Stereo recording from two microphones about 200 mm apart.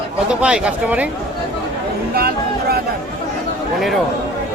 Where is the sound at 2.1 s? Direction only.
50° right (ahead or behind).